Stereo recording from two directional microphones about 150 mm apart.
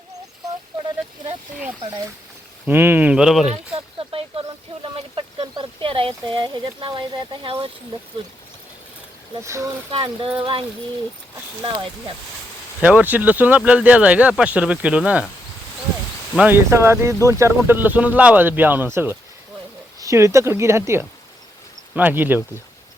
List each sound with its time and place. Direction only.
2.6 s speech: 15° right (ahead or behind)
3.5 s speech: 40° right (ahead or behind)
9.4 s speech: 20° right (ahead or behind)
9.9 s speech: 35° right (ahead or behind)
12.8 s speech: 10° right (ahead or behind)
16.4 s speech: 15° right (ahead or behind)